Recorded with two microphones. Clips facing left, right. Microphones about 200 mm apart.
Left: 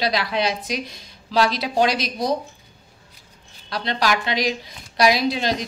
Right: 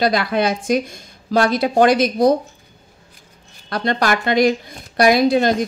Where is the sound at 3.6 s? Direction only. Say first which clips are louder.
Right 4 dB; 50° right (ahead or behind).